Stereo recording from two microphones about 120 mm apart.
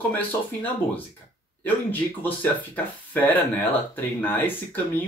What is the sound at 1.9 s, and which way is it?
Speech, 15° left (ahead or behind).